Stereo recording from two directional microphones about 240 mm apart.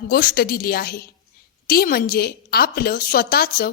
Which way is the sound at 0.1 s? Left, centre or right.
Left.